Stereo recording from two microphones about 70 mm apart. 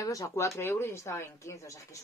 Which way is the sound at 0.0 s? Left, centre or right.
Left.